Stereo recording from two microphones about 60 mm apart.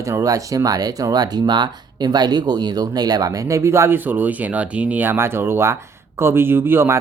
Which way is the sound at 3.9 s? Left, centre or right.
Right.